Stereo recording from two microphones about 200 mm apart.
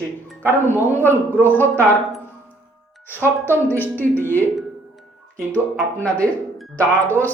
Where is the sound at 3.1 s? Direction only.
10° left (ahead or behind).